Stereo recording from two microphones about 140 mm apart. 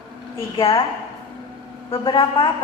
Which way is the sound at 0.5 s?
40° left (ahead or behind).